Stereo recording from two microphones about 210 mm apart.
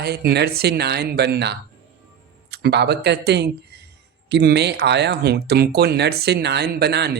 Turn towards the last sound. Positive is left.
turn(degrees=-55)  # may be behind; listen again after turning